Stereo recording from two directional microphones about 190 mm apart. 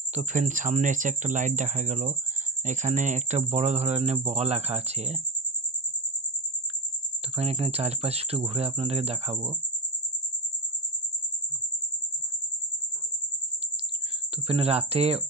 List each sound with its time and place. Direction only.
0.1 s speech: 40° right (ahead or behind)
7.3 s speech: 30° right (ahead or behind)
14.5 s speech: 30° right (ahead or behind)